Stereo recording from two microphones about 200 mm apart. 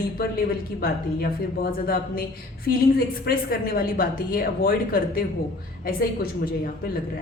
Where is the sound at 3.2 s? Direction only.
45° left (ahead or behind).